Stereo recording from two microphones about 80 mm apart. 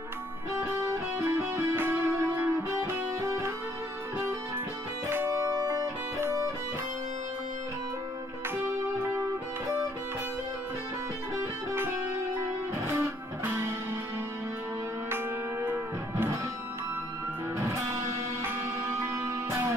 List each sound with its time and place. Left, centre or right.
0.7 s music: right
5.4 s music: right
11.7 s music: right
15.6 s music: right
17.6 s music: right